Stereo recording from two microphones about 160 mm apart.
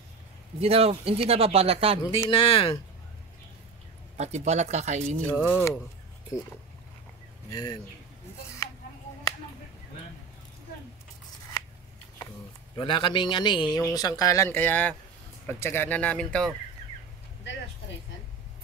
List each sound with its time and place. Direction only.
0.6 s speech: 40° right (ahead or behind)
2.0 s speech: 25° left (ahead or behind)
4.2 s speech: 45° right (ahead or behind)
5.2 s speech: 10° left (ahead or behind)
7.5 s speech: 25° left (ahead or behind)
12.7 s speech: 30° left (ahead or behind); by 16.4 s 5° left (ahead or behind)